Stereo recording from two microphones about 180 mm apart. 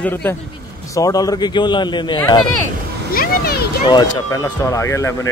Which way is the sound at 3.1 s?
55° left (ahead or behind).